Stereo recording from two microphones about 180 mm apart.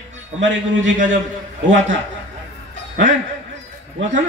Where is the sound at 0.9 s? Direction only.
45° right (ahead or behind).